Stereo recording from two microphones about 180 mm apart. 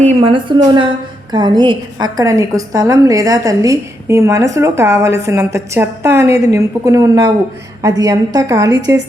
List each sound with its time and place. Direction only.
0.0 s a woman's voice: 35° right (ahead or behind); by 9.0 s 20° right (ahead or behind)